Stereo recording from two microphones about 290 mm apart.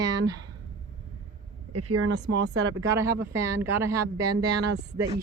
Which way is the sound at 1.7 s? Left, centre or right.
Right.